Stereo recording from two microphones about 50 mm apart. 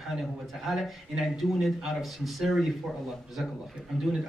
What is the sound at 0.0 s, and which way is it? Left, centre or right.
A man's voice, centre.